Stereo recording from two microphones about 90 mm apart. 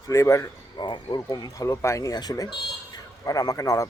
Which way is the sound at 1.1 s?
45° left (ahead or behind).